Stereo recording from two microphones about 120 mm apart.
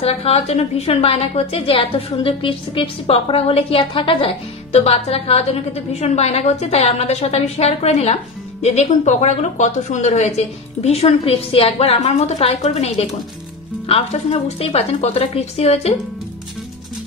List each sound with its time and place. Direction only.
0.0 s a woman's voice: 55° left (ahead or behind)